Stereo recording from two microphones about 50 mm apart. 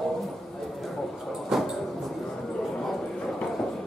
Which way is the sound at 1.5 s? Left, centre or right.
Centre.